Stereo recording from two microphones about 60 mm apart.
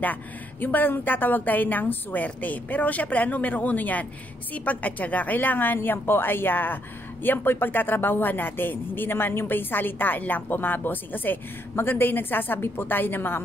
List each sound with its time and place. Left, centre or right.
0.0 s a woman's voice: left